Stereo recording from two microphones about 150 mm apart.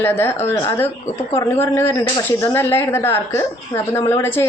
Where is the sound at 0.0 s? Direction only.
15° left (ahead or behind).